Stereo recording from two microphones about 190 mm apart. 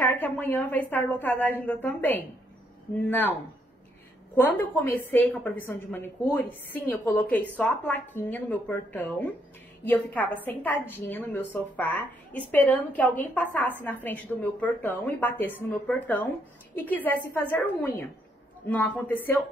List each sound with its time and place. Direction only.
0.0 s a woman's voice: 10° left (ahead or behind)
4.6 s a woman's voice: 10° left (ahead or behind)
18.7 s a woman's voice: 10° left (ahead or behind)